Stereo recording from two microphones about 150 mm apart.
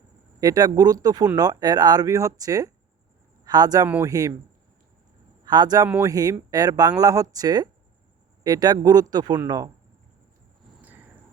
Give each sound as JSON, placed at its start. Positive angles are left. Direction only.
{"t": 0.3, "sound": "speech", "side_deg": -25}
{"t": 3.8, "sound": "speech", "side_deg": -10}
{"t": 4.1, "sound": "speech", "side_deg": -25}
{"t": 5.5, "sound": "speech", "side_deg": -25}
{"t": 10.8, "sound": "a sound", "side_deg": -10}